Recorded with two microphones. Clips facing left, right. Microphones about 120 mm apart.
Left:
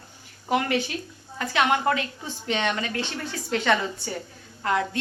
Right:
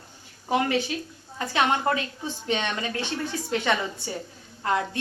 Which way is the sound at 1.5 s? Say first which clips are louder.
Left 1 dB; 25° right (ahead or behind).